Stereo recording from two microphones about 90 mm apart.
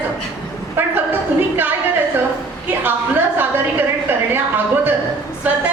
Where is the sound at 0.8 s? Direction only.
25° right (ahead or behind).